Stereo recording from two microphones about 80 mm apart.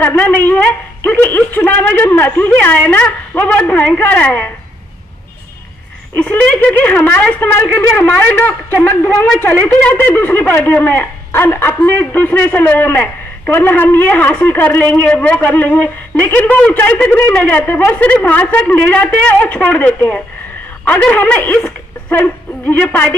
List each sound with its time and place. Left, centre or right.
0.0 s a woman's voice: left
6.1 s a woman's voice: centre
21.0 s a woman's voice: centre